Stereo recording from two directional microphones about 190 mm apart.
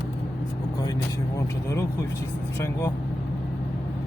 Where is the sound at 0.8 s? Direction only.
20° left (ahead or behind).